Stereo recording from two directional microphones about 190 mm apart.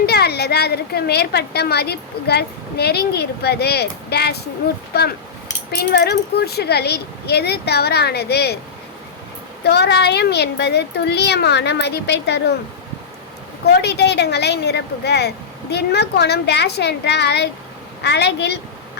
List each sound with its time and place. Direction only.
0.0 s a woman's voice: 55° left (ahead or behind)
5.7 s a woman's voice: 55° left (ahead or behind)
9.6 s a woman's voice: 60° left (ahead or behind)
13.7 s a woman's voice: 60° left (ahead or behind)